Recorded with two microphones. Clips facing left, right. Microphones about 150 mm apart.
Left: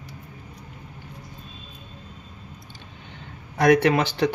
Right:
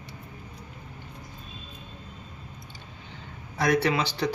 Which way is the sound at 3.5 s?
55° left (ahead or behind).